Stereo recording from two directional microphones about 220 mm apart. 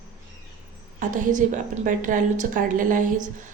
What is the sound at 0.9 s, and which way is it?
A woman's voice, 35° right (ahead or behind).